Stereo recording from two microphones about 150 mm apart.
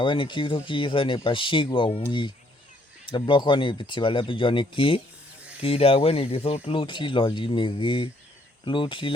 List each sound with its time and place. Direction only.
0.0 s speech: 35° left (ahead or behind)
5.4 s a sound: 10° right (ahead or behind)
5.6 s speech: 40° left (ahead or behind)